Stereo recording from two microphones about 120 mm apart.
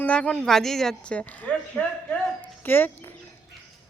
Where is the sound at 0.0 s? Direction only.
10° left (ahead or behind).